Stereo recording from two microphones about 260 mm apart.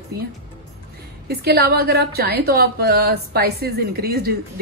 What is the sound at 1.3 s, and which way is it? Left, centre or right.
A woman's voice, right.